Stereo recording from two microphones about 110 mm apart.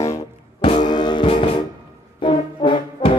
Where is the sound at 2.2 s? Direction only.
50° left (ahead or behind).